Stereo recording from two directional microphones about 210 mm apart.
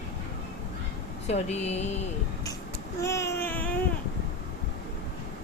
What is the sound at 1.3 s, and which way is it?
Speech, 30° left (ahead or behind).